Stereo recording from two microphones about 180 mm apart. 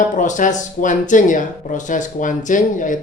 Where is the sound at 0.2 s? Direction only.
45° left (ahead or behind).